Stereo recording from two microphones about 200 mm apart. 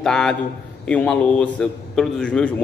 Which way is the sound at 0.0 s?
5° left (ahead or behind).